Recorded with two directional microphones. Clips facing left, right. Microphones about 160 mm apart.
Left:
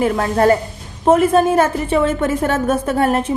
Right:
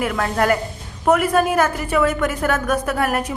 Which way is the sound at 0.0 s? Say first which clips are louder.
Left 5 dB; 30° left (ahead or behind).